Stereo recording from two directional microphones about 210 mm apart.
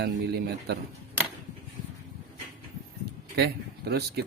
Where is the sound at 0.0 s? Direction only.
50° right (ahead or behind).